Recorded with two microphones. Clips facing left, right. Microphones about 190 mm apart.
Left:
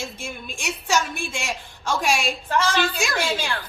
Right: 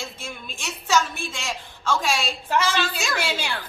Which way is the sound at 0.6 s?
15° left (ahead or behind).